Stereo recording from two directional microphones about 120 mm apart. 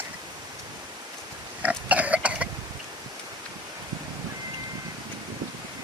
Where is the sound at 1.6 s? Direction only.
10° right (ahead or behind).